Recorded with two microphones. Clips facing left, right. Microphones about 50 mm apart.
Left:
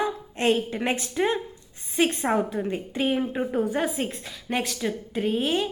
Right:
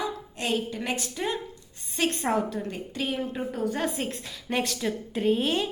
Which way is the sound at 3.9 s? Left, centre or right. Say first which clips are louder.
Left 2 dB; centre.